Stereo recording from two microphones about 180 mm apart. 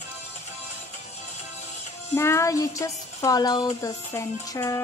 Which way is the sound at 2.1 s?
15° left (ahead or behind).